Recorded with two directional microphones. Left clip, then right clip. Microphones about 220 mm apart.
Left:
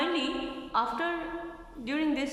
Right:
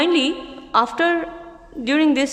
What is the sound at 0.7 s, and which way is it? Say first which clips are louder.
A woman's voice: right 12 dB; 50° right (ahead or behind).